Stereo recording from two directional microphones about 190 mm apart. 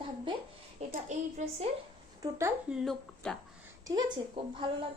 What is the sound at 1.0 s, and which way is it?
Speech, 35° right (ahead or behind).